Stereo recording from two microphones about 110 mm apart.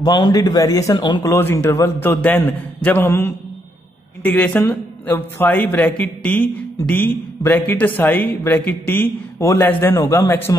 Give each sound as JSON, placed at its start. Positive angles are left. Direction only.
{"t": 0.0, "sound": "a man's voice", "side_deg": 40}
{"t": 0.9, "sound": "speech", "side_deg": 45}
{"t": 1.2, "sound": "a man's voice", "side_deg": 25}
{"t": 4.2, "sound": "speech", "side_deg": 10}
{"t": 4.6, "sound": "a man's voice", "side_deg": 20}